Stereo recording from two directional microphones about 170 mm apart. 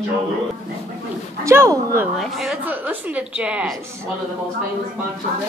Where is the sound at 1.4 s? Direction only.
15° right (ahead or behind).